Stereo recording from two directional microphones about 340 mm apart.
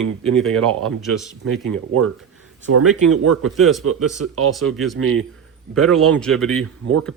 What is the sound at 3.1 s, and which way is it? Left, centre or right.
Speech, right.